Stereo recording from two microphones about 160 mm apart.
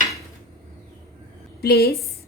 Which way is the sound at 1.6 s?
80° left.